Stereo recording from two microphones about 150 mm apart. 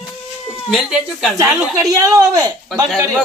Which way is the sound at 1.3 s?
20° right (ahead or behind).